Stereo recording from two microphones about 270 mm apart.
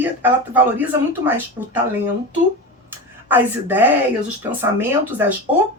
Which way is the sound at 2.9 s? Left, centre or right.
Centre.